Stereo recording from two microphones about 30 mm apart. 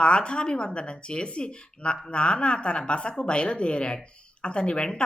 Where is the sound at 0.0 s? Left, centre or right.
Left.